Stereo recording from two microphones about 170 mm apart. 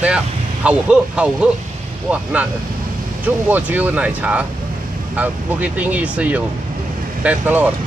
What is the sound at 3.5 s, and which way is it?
Speech, 10° right (ahead or behind).